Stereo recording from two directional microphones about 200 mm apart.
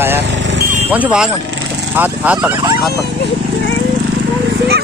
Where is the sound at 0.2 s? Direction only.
65° right (ahead or behind).